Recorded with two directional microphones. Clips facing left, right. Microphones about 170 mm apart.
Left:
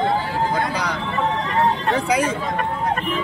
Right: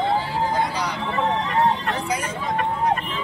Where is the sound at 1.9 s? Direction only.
75° left (ahead or behind).